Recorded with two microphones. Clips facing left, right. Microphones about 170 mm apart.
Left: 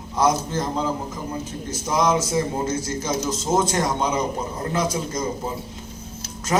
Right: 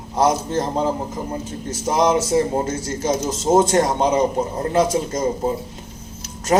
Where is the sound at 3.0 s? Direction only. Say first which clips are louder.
Right 7 dB; 25° right (ahead or behind).